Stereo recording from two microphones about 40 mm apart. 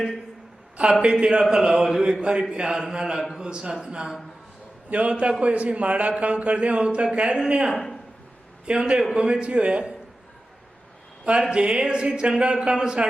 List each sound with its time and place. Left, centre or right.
0.8 s a man's voice: right
1.2 s a man's voice: centre
4.9 s a man's voice: right
11.5 s a man's voice: right